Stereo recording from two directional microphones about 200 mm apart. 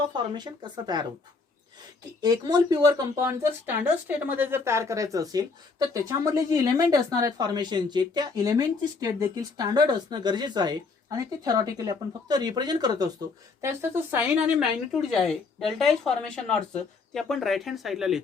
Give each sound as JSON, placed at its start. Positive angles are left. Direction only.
{"t": 0.0, "sound": "speech", "side_deg": -20}
{"t": 2.2, "sound": "speech", "side_deg": -20}